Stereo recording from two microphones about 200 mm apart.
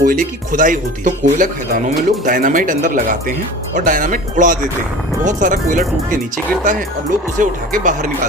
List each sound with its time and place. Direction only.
0.0 s speech: 40° right (ahead or behind)